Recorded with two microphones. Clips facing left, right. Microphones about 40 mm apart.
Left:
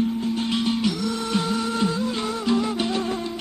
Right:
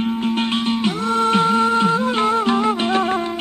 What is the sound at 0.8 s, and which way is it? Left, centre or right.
Music, right.